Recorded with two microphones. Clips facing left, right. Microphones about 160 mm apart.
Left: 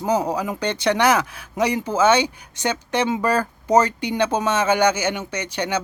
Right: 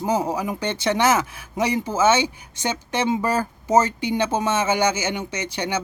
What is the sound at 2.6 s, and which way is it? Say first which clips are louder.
A man's voice: left 1 dB; 10° right (ahead or behind).